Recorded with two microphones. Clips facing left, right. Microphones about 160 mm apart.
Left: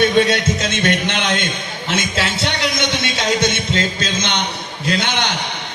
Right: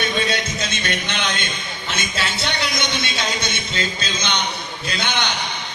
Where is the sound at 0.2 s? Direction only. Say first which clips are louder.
Left 8 dB; 85° left.